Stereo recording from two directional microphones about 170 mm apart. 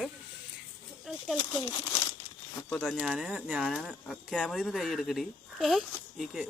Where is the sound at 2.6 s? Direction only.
10° left (ahead or behind).